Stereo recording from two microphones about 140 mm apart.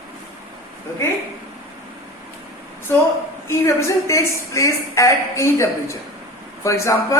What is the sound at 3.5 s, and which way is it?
A woman's voice, 20° left (ahead or behind).